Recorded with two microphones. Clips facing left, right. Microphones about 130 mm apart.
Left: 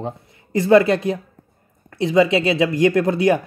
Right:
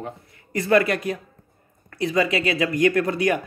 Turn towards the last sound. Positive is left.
turn(degrees=25)  # may be behind; listen again after turning